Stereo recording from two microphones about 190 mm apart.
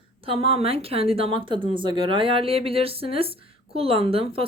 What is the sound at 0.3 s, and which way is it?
Speech, 30° right (ahead or behind).